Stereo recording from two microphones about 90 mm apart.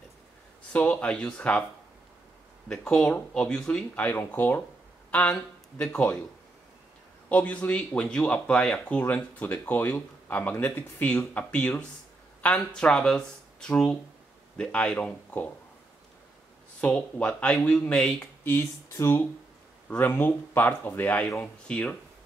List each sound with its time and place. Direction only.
0.7 s speech: 15° left (ahead or behind)
2.7 s speech: 5° left (ahead or behind)
7.2 s speech: 20° left (ahead or behind)
16.8 s speech: 15° left (ahead or behind)
18.4 s speech: 25° left (ahead or behind)